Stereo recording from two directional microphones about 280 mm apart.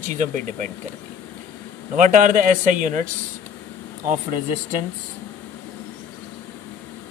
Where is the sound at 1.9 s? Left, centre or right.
Right.